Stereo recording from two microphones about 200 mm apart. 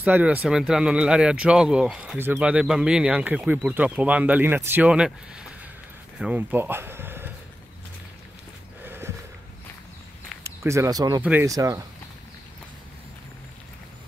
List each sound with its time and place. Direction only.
0.0 s speech: 5° right (ahead or behind)
8.8 s a sound: 10° right (ahead or behind)
10.4 s speech: 15° right (ahead or behind)